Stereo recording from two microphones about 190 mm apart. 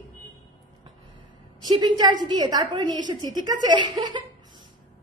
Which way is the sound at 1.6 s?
20° right (ahead or behind).